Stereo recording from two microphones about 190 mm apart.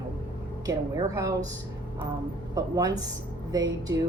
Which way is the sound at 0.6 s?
15° right (ahead or behind).